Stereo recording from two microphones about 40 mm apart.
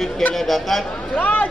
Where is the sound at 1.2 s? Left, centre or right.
Left.